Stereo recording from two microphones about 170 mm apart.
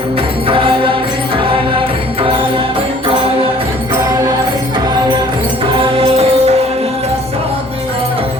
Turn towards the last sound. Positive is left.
turn(degrees=-35)  # may be behind; listen again after turning